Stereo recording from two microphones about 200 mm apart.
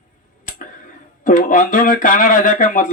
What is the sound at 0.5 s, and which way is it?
Tick, 40° left (ahead or behind).